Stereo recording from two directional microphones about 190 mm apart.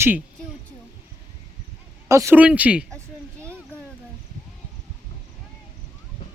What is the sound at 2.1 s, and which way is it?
Speech, 15° right (ahead or behind).